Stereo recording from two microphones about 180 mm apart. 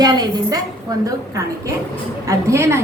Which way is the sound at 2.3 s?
15° right (ahead or behind).